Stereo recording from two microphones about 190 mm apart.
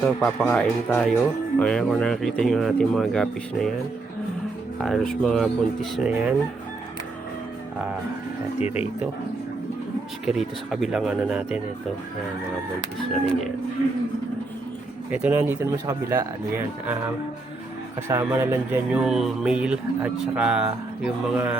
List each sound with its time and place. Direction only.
0.0 s speech: 5° left (ahead or behind)
4.8 s speech: centre (ahead or behind)
8.6 s speech: 35° left (ahead or behind)
10.2 s speech: centre (ahead or behind)
15.1 s speech: 10° right (ahead or behind)
18.1 s speech: 10° right (ahead or behind)